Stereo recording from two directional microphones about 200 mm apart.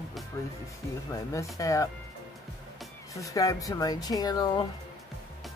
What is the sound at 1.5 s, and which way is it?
Speech, 15° left (ahead or behind).